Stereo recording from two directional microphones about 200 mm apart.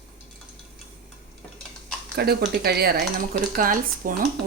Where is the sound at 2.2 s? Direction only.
50° right (ahead or behind).